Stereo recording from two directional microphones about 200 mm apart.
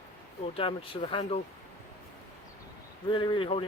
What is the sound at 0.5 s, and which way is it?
Speech, 25° left (ahead or behind).